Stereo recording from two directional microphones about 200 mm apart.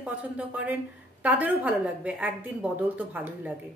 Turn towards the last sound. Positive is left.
turn(degrees=-10)  # may be behind; listen again after turning